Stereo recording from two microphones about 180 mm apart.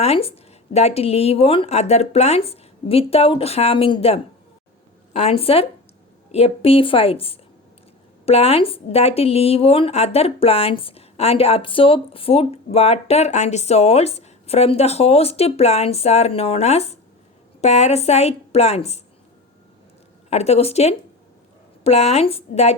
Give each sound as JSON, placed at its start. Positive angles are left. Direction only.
{"t": 0.0, "sound": "a woman's voice", "side_deg": 35}
{"t": 20.3, "sound": "a woman's voice", "side_deg": 35}